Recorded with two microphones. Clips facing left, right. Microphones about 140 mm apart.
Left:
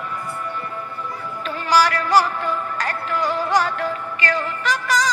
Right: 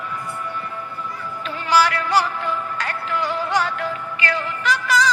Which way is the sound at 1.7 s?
40° left (ahead or behind).